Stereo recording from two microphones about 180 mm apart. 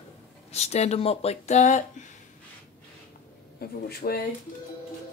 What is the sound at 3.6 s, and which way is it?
Speech, 60° left (ahead or behind).